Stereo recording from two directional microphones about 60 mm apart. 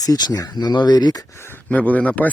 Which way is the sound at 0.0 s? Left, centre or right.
Left.